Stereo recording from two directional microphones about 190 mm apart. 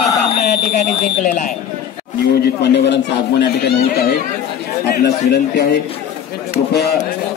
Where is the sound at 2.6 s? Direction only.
65° left (ahead or behind).